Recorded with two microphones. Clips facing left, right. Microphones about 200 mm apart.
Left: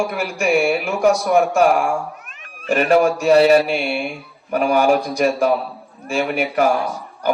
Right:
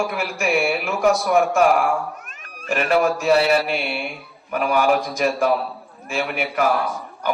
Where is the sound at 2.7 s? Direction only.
40° left (ahead or behind).